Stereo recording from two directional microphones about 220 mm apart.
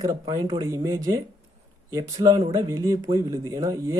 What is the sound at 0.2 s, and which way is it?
Speech, 15° right (ahead or behind).